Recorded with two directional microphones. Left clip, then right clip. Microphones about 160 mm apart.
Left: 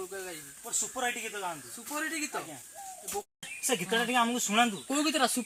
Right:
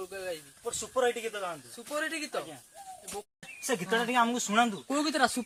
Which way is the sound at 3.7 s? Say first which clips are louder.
Even; 5° right (ahead or behind).